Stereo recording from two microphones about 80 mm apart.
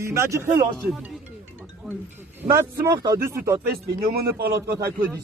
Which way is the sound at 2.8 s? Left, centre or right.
Right.